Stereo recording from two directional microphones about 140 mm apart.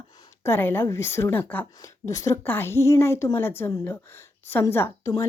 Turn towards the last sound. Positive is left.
turn(degrees=20)  # may be behind; listen again after turning